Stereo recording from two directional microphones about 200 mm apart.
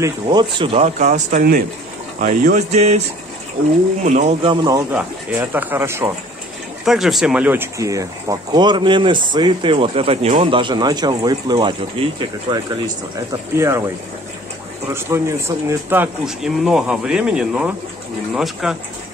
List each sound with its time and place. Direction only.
0.0 s speech: 20° right (ahead or behind); by 2.9 s 40° right (ahead or behind)
4.0 s speech: 35° right (ahead or behind); by 4.8 s 20° right (ahead or behind)
4.9 s speech: 10° right (ahead or behind)
6.8 s speech: centre (ahead or behind)